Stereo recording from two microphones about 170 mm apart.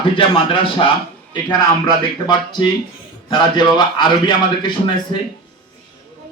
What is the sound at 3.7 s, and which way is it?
Speech, 25° left (ahead or behind).